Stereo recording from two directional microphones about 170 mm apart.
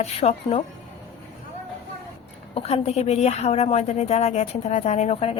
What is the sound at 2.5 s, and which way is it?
A woman's voice, 35° left (ahead or behind).